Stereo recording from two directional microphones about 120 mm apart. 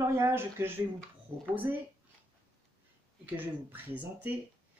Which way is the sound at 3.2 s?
15° right (ahead or behind).